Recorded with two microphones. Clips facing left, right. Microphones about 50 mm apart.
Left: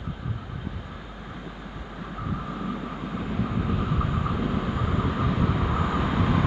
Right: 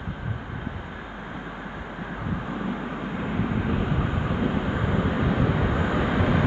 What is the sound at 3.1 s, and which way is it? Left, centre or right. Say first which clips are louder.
Vehicle: right 1 dB; right.